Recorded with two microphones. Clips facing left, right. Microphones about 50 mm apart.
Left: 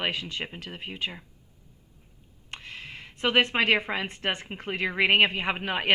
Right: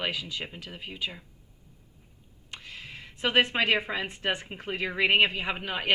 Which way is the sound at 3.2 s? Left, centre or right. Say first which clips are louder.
Left 1 dB; left.